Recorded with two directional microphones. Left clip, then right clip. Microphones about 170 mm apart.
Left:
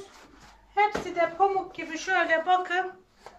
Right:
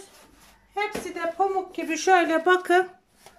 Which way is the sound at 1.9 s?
85° right.